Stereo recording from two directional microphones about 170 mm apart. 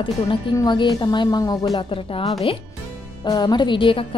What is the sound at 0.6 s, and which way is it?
A woman's voice, 25° left (ahead or behind).